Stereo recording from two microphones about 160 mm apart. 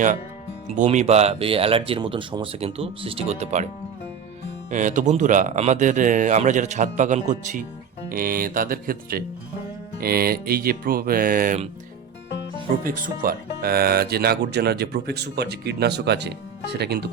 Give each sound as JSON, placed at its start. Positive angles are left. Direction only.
{"t": 0.7, "sound": "speech", "side_deg": -50}
{"t": 4.7, "sound": "speech", "side_deg": -50}
{"t": 8.1, "sound": "speech", "side_deg": -60}
{"t": 10.0, "sound": "music", "side_deg": -70}
{"t": 12.8, "sound": "speech", "side_deg": -60}